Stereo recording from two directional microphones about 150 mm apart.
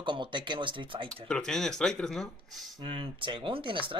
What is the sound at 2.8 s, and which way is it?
Speech, 35° right (ahead or behind).